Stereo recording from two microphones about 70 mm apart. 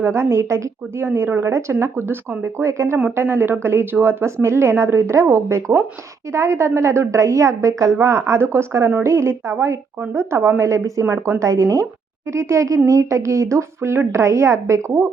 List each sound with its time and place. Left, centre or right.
0.0 s a woman's voice: right
3.2 s a woman's voice: right
11.0 s a woman's voice: right
11.3 s speech: right